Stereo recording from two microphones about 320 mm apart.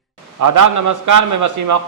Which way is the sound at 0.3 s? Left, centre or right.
Right.